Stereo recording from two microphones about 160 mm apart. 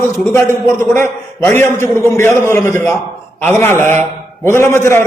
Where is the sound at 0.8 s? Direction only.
15° left (ahead or behind).